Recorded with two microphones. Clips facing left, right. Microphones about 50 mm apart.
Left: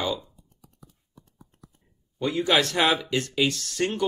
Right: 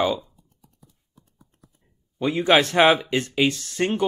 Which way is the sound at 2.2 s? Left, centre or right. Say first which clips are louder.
Right 4 dB; right.